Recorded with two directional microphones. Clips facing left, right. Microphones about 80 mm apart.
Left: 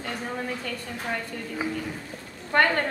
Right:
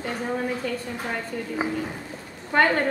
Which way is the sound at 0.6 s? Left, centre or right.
Centre.